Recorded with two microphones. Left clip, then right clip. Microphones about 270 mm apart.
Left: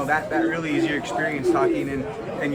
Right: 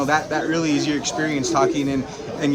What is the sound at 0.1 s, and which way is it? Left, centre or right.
A man's voice, centre.